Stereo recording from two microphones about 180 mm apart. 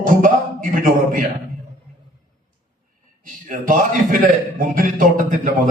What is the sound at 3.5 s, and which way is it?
A man's voice, 45° right (ahead or behind).